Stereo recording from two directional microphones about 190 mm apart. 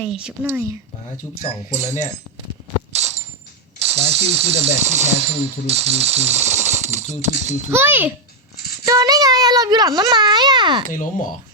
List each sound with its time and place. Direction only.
0.0 s speech: 5° right (ahead or behind)
2.9 s a sound: 35° right (ahead or behind)
3.8 s speech: 35° right (ahead or behind)
7.7 s a child's voice: 10° right (ahead or behind)